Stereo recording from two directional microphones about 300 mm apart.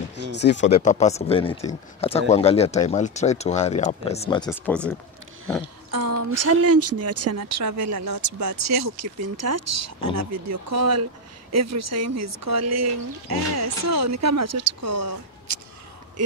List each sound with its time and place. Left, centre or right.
0.1 s speech: left
0.7 s speech: left; by 4.9 s centre
5.9 s a sound: right
6.4 s speech: right